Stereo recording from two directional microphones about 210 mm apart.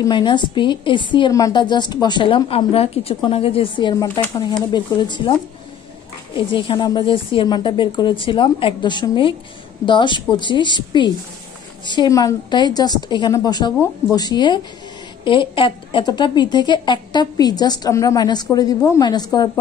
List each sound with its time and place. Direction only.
0.0 s a woman's voice: 20° left (ahead or behind)
6.3 s a woman's voice: 25° left (ahead or behind)